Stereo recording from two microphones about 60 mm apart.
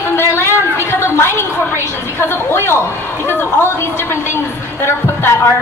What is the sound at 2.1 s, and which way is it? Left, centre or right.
A man's voice, left.